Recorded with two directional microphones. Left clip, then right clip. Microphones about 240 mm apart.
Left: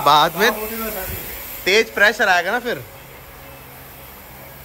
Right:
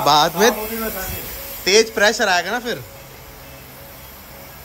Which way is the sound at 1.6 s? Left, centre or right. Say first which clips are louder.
Even; centre.